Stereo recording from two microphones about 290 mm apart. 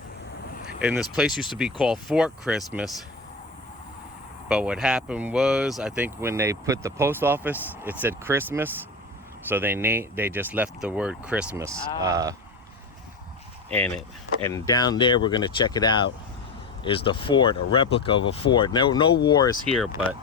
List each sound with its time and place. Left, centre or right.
0.8 s speech: centre
4.4 s speech: centre
13.7 s speech: centre
19.6 s speech: centre